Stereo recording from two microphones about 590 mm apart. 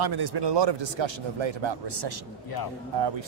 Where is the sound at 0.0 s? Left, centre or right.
Right.